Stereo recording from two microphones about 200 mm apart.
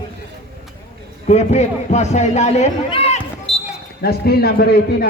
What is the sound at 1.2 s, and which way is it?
Speech, 35° left (ahead or behind).